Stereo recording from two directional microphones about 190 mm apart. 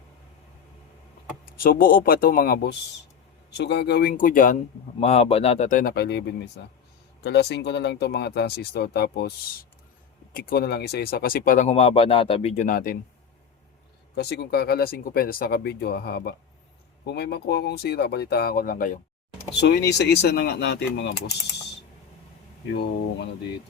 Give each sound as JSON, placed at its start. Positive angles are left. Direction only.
{"t": 1.5, "sound": "speech", "side_deg": 50}
{"t": 4.9, "sound": "speech", "side_deg": 35}
{"t": 14.2, "sound": "speech", "side_deg": 60}
{"t": 19.5, "sound": "speech", "side_deg": 65}
{"t": 22.7, "sound": "speech", "side_deg": 65}